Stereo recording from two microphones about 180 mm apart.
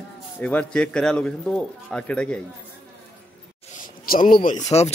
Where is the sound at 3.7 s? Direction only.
50° left (ahead or behind).